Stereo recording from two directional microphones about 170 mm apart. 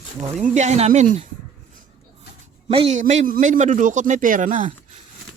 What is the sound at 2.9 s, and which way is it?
Speech, 45° right (ahead or behind).